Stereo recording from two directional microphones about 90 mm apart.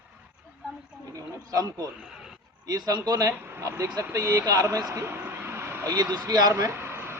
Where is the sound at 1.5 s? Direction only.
45° right (ahead or behind).